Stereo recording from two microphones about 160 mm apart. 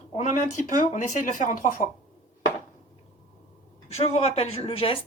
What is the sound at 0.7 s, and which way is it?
A woman's voice, 55° left (ahead or behind).